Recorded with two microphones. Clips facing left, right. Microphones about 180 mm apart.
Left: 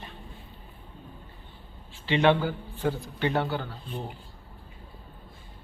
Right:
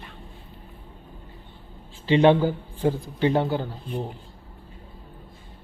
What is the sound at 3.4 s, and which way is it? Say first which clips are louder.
Speech: right 5 dB; 15° right (ahead or behind).